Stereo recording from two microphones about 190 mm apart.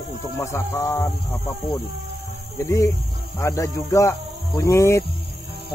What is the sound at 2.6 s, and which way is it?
Speech, 15° left (ahead or behind).